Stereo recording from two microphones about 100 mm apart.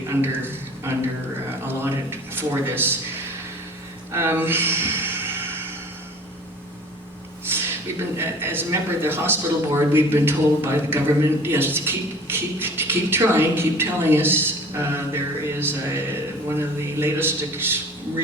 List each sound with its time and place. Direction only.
0.1 s a man's voice: 25° right (ahead or behind)
1.6 s a sound: 20° right (ahead or behind)
4.1 s gasp: 25° right (ahead or behind)
7.5 s speech: 25° right (ahead or behind)